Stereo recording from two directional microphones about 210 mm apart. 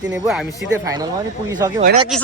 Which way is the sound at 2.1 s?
Centre (ahead or behind).